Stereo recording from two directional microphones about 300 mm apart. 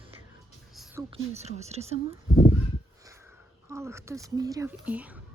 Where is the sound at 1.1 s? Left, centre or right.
Right.